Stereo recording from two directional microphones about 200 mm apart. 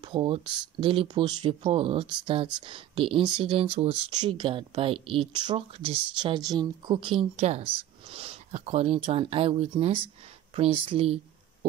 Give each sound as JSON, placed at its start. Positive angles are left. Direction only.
{"t": 0.0, "sound": "speech", "side_deg": -25}